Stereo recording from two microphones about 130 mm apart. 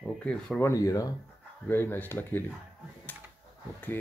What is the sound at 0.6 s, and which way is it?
Speech, 25° left (ahead or behind).